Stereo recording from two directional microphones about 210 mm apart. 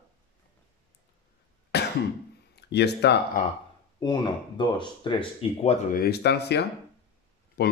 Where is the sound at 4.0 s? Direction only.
20° left (ahead or behind).